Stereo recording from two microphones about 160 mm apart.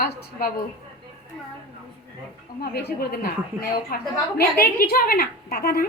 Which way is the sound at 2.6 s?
80° left.